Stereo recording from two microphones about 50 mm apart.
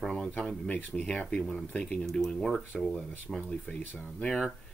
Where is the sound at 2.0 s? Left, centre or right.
Centre.